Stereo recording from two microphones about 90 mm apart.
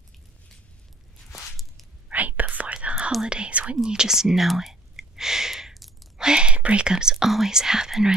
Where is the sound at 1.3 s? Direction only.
Centre (ahead or behind).